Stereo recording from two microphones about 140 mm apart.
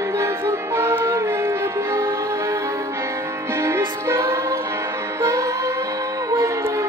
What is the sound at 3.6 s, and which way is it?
Music, 20° right (ahead or behind).